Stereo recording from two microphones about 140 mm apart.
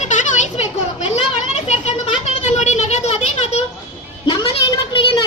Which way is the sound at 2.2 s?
55° left (ahead or behind).